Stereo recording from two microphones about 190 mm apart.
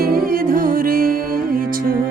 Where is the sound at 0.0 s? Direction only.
50° right (ahead or behind).